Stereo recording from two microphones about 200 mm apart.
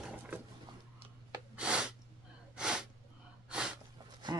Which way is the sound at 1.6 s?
5° right (ahead or behind).